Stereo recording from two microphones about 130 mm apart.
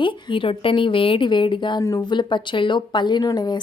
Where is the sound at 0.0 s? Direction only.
40° left (ahead or behind).